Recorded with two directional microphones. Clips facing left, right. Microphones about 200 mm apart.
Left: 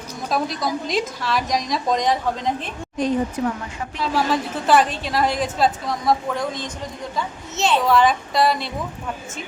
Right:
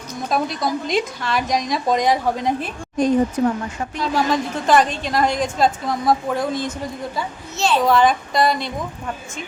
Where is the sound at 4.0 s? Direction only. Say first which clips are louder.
Right 1 dB; 5° left (ahead or behind).